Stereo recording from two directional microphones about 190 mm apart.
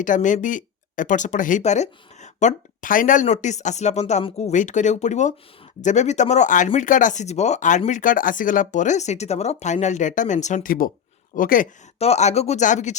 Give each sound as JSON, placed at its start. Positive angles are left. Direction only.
{"t": 0.0, "sound": "speech", "side_deg": 40}
{"t": 11.9, "sound": "speech", "side_deg": 35}